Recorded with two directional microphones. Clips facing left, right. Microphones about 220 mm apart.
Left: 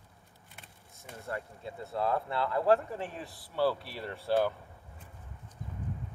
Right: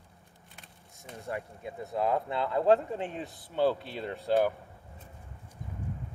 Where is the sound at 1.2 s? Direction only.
15° right (ahead or behind).